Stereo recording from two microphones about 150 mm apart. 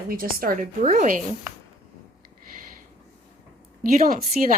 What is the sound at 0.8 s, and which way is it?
Speech, 50° right (ahead or behind).